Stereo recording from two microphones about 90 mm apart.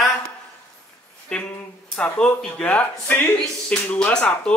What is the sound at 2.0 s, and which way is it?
Speech, 10° left (ahead or behind).